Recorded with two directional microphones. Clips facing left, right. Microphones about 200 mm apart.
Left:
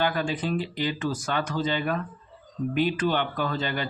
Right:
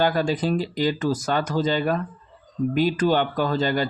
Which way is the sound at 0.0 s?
35° right (ahead or behind).